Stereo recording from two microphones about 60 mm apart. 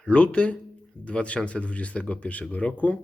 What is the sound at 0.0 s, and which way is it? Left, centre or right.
Speech, centre.